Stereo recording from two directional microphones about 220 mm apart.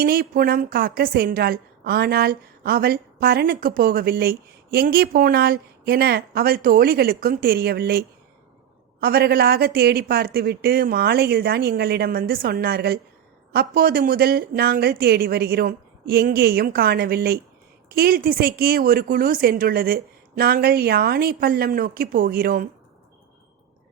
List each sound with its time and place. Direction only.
0.0 s a woman's voice: 45° right (ahead or behind)